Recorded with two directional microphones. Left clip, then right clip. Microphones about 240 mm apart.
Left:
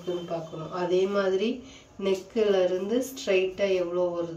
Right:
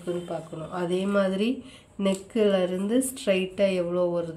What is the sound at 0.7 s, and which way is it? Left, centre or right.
A woman's voice, right.